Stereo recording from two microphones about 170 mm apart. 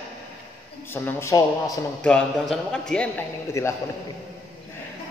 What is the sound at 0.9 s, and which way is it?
Speech, 10° left (ahead or behind).